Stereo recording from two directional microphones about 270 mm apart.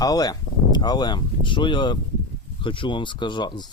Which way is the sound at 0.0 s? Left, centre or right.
Centre.